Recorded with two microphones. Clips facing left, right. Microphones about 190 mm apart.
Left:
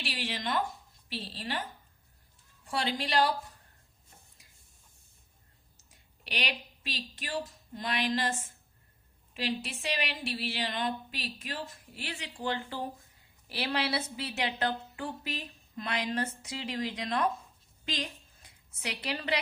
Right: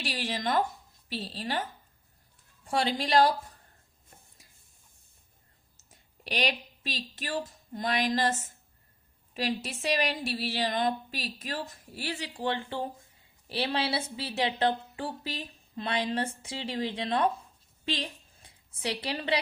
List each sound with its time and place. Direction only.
0.0 s a woman's voice: 40° right (ahead or behind)
2.6 s a woman's voice: 45° right (ahead or behind)
6.2 s a woman's voice: 45° right (ahead or behind)